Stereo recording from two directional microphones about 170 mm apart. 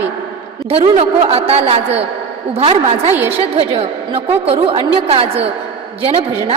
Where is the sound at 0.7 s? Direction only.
35° right (ahead or behind).